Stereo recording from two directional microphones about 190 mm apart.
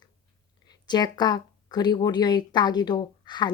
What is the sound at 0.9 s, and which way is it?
Speech, 20° left (ahead or behind).